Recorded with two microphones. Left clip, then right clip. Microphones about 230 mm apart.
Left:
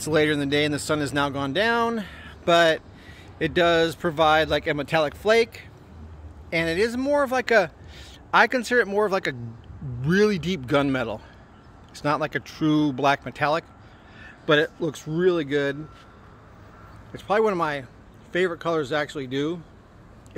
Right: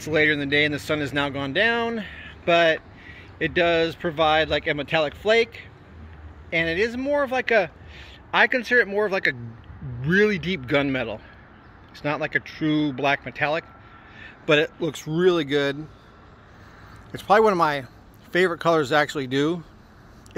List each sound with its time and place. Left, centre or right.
0.0 s speech: centre
6.5 s a man's voice: centre
14.2 s speech: centre
17.1 s speech: right